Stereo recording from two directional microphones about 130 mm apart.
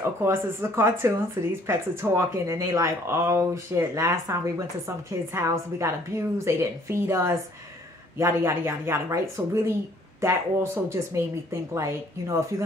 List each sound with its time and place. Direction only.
0.2 s speech: 20° right (ahead or behind)